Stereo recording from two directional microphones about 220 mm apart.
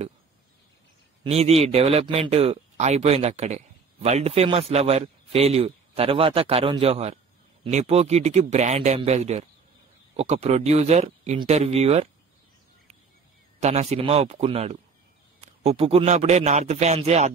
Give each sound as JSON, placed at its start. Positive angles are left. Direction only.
{"t": 1.2, "sound": "speech", "side_deg": -30}
{"t": 13.6, "sound": "speech", "side_deg": -30}